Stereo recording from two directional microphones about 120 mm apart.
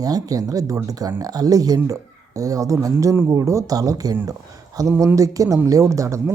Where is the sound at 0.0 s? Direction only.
30° right (ahead or behind).